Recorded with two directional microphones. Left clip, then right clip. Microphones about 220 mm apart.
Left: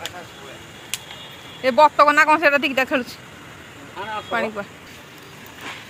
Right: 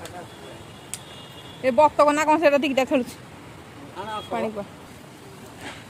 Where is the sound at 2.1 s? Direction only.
15° right (ahead or behind).